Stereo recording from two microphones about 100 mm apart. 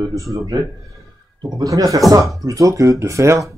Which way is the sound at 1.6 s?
35° right (ahead or behind).